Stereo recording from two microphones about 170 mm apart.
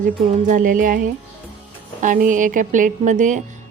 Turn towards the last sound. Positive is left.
turn(degrees=-45)  # may be behind; listen again after turning